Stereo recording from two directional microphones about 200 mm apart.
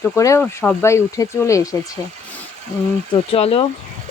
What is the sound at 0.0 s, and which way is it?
Speech, 15° left (ahead or behind).